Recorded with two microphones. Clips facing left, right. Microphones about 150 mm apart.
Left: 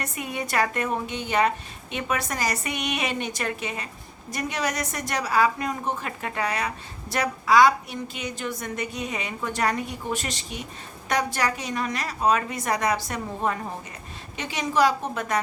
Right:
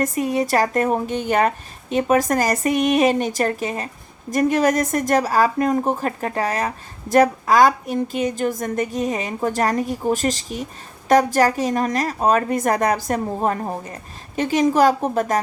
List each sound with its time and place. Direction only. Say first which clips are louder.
0.0 s a woman's voice: right 11 dB; 35° right (ahead or behind)